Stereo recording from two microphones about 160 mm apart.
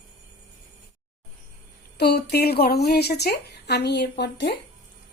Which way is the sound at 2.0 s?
85° left.